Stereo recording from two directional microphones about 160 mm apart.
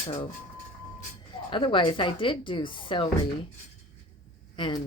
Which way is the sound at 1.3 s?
30° left (ahead or behind).